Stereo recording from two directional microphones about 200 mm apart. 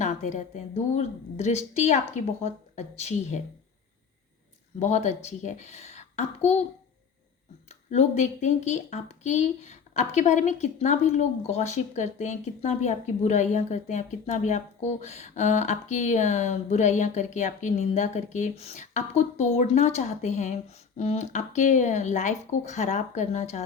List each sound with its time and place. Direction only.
0.0 s speech: 35° left (ahead or behind)
4.8 s speech: 35° left (ahead or behind)
7.7 s speech: 35° left (ahead or behind)